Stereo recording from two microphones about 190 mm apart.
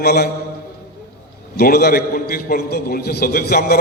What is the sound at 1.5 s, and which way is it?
A man's voice, 55° left (ahead or behind).